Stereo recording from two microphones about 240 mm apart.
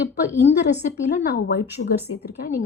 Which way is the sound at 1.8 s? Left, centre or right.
Left.